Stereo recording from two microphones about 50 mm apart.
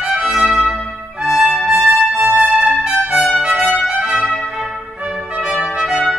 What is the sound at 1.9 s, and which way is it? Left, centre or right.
Music, right.